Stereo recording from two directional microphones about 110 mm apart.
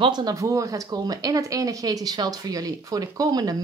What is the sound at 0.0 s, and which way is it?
Speech, 40° right (ahead or behind).